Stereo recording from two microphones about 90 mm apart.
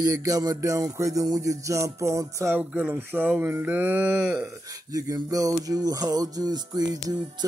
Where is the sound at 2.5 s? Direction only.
15° right (ahead or behind).